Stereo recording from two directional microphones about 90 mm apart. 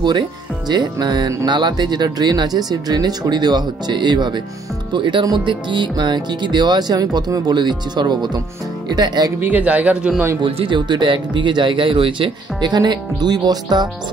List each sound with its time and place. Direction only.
0.7 s speech: 50° right (ahead or behind)
9.4 s speech: 15° right (ahead or behind)
10.4 s speech: 65° right (ahead or behind)